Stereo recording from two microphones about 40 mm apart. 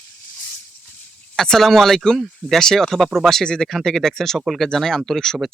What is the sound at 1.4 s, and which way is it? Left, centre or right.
Speech, centre.